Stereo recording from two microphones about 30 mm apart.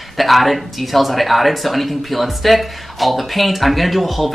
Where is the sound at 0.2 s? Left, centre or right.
Centre.